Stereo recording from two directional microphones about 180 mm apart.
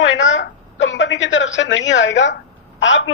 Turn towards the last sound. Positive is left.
turn(degrees=90)